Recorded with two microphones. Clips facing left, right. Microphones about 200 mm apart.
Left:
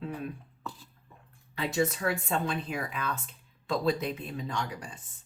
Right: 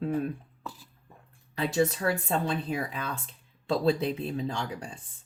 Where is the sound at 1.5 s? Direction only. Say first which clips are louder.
Right 3 dB; 30° right (ahead or behind).